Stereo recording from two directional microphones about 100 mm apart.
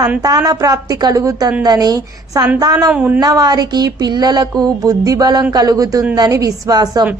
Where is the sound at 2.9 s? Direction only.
15° right (ahead or behind).